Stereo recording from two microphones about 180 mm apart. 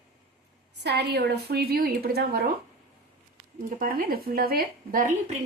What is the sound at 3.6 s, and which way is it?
Speech, 50° right (ahead or behind).